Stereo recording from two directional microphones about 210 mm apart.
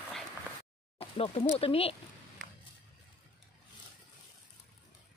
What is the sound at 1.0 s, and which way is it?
Speech, 30° left (ahead or behind).